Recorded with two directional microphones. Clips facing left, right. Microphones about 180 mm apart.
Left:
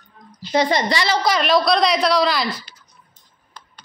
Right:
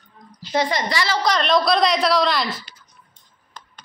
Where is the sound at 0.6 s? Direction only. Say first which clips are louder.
Left 3 dB; 25° left (ahead or behind).